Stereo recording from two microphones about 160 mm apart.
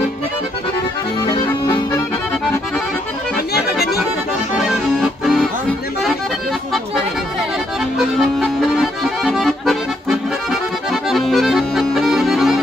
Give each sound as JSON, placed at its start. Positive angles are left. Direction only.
{"t": 1.3, "sound": "accordion", "side_deg": 25}
{"t": 4.6, "sound": "accordion", "side_deg": 0}
{"t": 8.2, "sound": "accordion", "side_deg": 0}